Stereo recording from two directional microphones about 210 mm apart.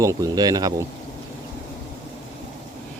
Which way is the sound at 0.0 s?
15° right (ahead or behind).